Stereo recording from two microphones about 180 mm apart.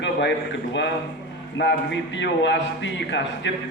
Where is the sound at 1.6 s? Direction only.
80° left.